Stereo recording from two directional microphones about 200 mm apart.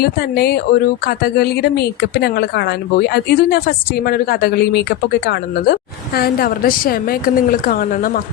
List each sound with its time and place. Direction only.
0.0 s a woman's voice: 50° left (ahead or behind)